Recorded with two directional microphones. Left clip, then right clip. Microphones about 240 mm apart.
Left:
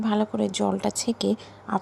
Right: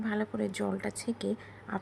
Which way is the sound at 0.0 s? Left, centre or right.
Centre.